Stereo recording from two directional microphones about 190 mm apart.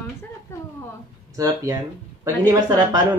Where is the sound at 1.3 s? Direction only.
20° right (ahead or behind).